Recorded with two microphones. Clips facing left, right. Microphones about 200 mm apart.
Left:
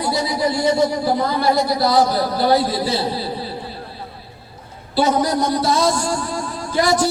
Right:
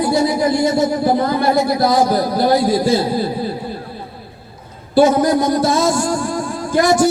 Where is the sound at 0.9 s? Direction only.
50° right (ahead or behind).